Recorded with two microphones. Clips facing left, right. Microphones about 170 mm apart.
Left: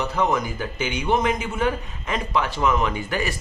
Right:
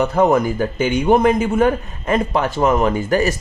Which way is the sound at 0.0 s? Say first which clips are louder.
Right 8 dB; 50° right (ahead or behind).